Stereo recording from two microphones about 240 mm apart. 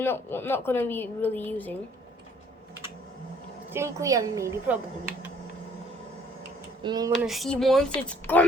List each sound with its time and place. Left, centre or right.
0.0 s a woman's voice: centre
3.7 s a woman's voice: centre
6.8 s a woman's voice: centre
7.3 s a sound: centre